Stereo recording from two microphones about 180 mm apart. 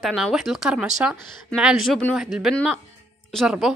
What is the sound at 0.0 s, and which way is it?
Speech, centre (ahead or behind).